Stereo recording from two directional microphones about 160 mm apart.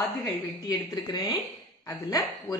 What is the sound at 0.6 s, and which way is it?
A woman's voice, 25° left (ahead or behind).